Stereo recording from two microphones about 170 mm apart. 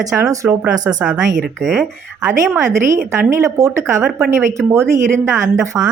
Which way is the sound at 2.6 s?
20° right (ahead or behind).